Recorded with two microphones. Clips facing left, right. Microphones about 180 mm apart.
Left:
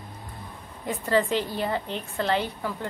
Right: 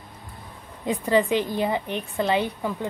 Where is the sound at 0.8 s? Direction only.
15° right (ahead or behind).